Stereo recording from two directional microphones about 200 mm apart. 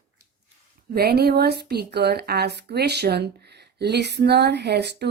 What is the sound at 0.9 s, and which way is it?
A woman's voice, 55° right (ahead or behind).